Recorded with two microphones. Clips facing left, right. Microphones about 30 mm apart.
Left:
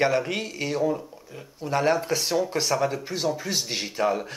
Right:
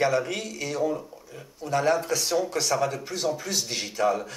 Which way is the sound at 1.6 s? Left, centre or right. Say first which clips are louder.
Left 1 dB; left.